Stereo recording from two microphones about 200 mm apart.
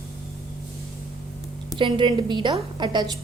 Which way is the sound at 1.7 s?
25° right (ahead or behind).